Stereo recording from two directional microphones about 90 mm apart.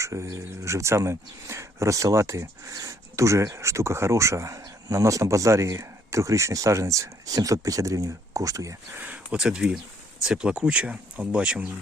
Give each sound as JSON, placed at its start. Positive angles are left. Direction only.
{"t": 0.0, "sound": "speech", "side_deg": -35}
{"t": 9.0, "sound": "speech", "side_deg": -15}